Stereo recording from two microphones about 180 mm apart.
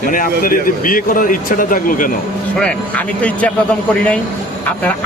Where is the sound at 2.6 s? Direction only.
5° left (ahead or behind).